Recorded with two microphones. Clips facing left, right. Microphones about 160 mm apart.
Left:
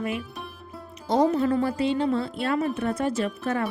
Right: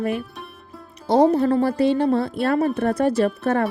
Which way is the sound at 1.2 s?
35° right (ahead or behind).